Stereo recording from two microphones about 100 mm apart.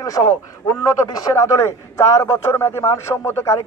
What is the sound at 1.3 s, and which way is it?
A man's voice, 25° left (ahead or behind).